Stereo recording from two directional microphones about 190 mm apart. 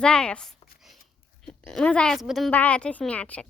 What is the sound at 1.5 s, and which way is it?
A woman's voice, 5° left (ahead or behind).